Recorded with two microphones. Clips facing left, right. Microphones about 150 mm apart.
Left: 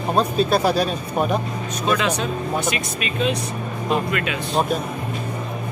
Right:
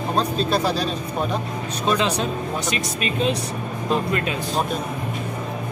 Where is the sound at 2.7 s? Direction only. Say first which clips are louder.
Right 1 dB; 35° right (ahead or behind).